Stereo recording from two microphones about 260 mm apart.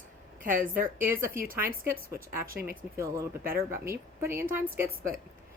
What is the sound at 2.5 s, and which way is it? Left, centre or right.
Speech, right.